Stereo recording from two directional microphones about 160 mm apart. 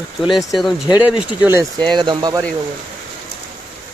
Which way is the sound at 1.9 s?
30° right (ahead or behind).